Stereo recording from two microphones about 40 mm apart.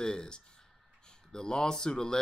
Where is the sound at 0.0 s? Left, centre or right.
Centre.